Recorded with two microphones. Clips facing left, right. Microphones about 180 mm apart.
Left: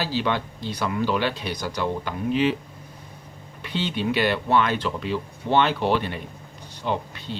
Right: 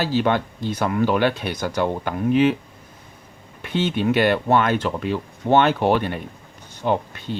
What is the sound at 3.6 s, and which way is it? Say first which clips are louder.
Speech: right 5 dB; 50° right (ahead or behind).